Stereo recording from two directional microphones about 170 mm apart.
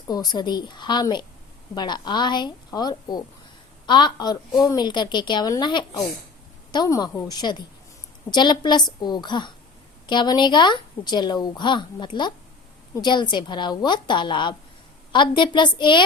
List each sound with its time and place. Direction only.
0.1 s a woman's voice: 25° left (ahead or behind)